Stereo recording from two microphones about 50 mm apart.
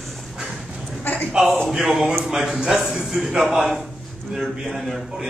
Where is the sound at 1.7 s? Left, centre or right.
Centre.